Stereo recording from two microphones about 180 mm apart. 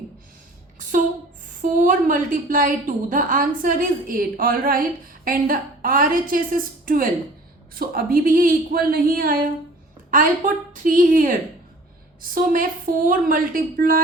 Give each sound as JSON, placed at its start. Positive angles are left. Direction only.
{"t": 0.8, "sound": "a woman's voice", "side_deg": -45}